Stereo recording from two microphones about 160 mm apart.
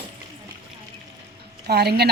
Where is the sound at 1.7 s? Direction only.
90° right.